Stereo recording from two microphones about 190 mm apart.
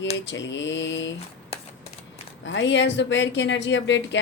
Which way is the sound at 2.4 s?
70° left (ahead or behind).